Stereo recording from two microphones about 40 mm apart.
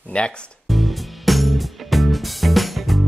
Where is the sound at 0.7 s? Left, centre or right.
Centre.